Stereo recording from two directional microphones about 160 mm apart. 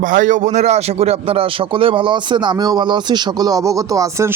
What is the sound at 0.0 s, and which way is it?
Speech, 55° right (ahead or behind).